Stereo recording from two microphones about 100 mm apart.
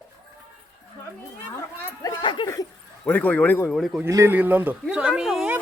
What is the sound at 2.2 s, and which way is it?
Speech, 55° left (ahead or behind).